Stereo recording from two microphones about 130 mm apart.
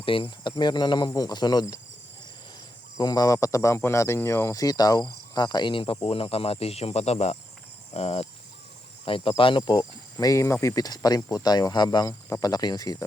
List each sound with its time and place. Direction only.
0.0 s speech: 40° left (ahead or behind)
3.0 s speech: 30° left (ahead or behind)